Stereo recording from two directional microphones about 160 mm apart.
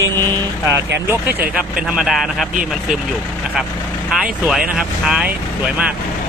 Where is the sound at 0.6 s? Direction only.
15° right (ahead or behind).